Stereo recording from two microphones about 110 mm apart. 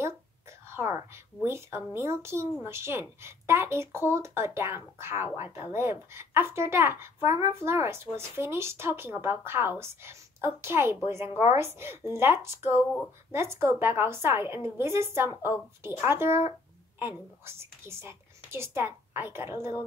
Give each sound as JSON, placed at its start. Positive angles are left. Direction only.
{"t": 0.7, "sound": "a child's voice", "side_deg": -25}